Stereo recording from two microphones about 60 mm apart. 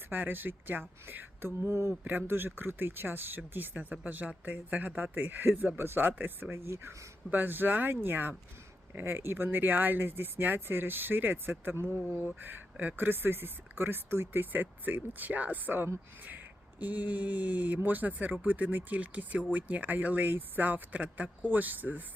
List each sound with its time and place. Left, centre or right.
0.1 s speech: right
2.0 s speech: right
6.7 s speech: right
7.3 s speech: right